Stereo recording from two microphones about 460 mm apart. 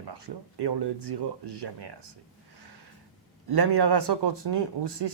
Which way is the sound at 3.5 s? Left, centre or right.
Right.